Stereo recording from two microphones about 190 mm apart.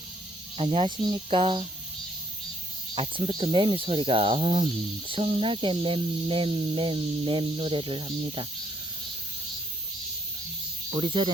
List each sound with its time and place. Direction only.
0.5 s speech: 30° right (ahead or behind)
2.9 s speech: 30° right (ahead or behind)
10.9 s speech: 25° right (ahead or behind)